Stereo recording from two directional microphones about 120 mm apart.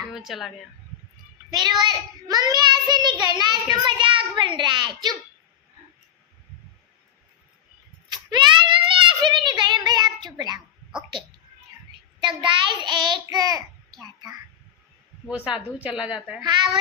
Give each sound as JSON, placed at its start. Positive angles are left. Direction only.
{"t": 0.0, "sound": "speech", "side_deg": 0}
{"t": 1.5, "sound": "a child's voice", "side_deg": -35}
{"t": 2.9, "sound": "child singing", "side_deg": -35}
{"t": 3.8, "sound": "a child's voice", "side_deg": -45}
{"t": 8.1, "sound": "a sound", "side_deg": -35}
{"t": 12.2, "sound": "child singing", "side_deg": -40}
{"t": 15.4, "sound": "a woman's voice", "side_deg": -5}